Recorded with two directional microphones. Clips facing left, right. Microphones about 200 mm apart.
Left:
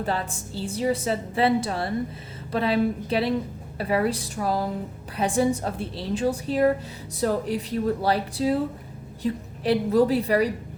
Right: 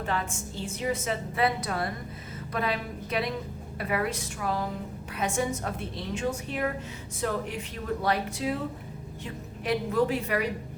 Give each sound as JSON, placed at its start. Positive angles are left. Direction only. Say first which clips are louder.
{"t": 0.0, "sound": "a woman's voice", "louder": "left 3 dB", "side_deg": 35}